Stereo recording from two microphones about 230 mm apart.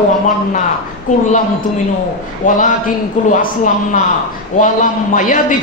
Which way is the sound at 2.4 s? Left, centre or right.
Left.